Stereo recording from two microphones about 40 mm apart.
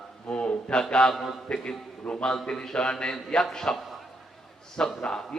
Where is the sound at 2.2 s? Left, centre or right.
Centre.